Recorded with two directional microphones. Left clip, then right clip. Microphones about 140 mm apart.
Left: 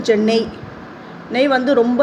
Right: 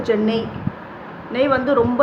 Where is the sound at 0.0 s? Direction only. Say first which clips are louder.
Left 4 dB; 25° left (ahead or behind).